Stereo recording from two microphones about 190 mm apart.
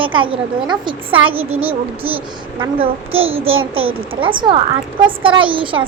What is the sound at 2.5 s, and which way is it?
Speech, 30° right (ahead or behind).